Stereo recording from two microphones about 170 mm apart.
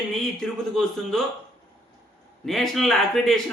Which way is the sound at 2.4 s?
Centre (ahead or behind).